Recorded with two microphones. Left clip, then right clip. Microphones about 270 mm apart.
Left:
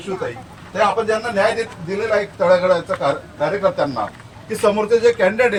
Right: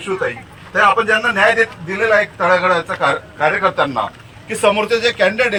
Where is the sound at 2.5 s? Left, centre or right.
Centre.